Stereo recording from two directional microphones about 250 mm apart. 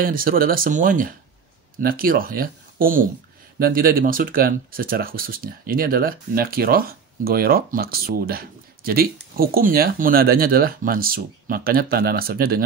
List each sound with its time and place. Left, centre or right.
0.0 s speech: right